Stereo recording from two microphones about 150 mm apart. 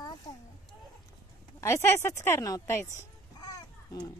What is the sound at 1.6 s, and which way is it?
A woman's voice, 20° left (ahead or behind).